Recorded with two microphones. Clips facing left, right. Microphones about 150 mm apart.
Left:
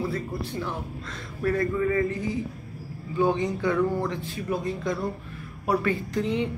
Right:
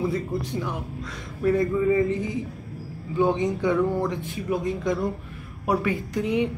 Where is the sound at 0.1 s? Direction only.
15° right (ahead or behind).